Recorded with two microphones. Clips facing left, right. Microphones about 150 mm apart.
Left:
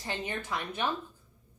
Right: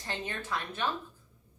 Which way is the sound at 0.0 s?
15° left (ahead or behind).